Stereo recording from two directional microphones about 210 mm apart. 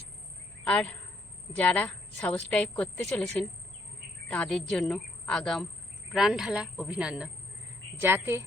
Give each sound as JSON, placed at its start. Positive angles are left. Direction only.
{"t": 0.6, "sound": "a woman's voice", "side_deg": 5}